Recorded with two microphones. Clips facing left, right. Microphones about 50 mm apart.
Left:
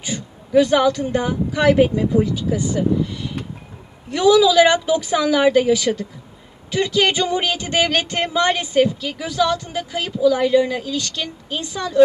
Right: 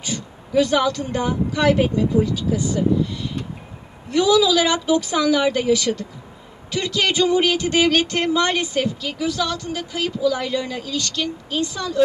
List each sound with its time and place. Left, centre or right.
0.0 s speech: centre
4.1 s a woman's voice: centre
8.1 s a woman's voice: centre